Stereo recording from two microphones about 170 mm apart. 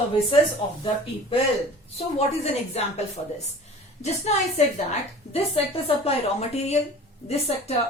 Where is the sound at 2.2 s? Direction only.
40° left (ahead or behind).